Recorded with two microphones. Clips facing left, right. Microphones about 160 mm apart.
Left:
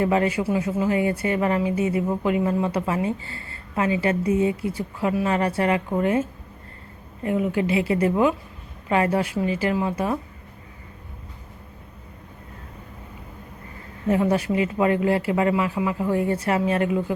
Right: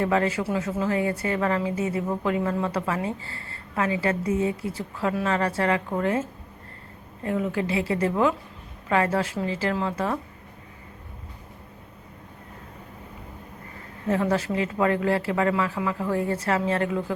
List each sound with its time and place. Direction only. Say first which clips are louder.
0.0 s speech: left 2 dB; 20° left (ahead or behind)
14.1 s speech: left 3 dB; 15° left (ahead or behind)